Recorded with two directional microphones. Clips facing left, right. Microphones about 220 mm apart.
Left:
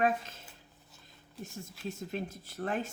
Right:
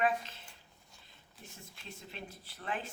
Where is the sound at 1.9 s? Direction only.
45° left (ahead or behind).